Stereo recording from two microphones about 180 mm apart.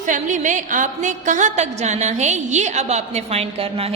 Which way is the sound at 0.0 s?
45° right (ahead or behind).